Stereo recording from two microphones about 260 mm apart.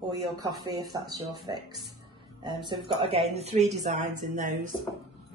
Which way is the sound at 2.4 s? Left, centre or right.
Centre.